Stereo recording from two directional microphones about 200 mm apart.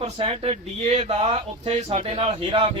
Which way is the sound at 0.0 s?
30° right (ahead or behind).